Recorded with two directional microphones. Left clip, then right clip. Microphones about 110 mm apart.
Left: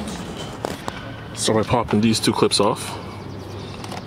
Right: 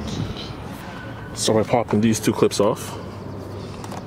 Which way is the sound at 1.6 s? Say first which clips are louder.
Even; 5° left (ahead or behind).